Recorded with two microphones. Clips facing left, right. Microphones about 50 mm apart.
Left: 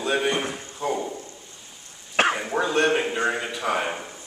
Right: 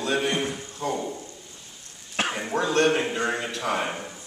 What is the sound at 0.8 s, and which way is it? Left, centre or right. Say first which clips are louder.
Speech: left 2 dB; centre.